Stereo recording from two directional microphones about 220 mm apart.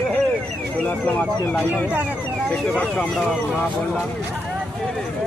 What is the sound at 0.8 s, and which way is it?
Speech, 10° left (ahead or behind).